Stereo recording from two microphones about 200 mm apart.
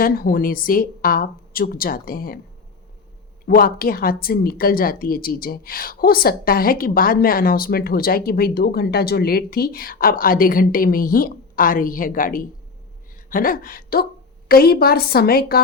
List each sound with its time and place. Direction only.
0.0 s a woman's voice: 45° left (ahead or behind)
3.4 s a woman's voice: 45° left (ahead or behind)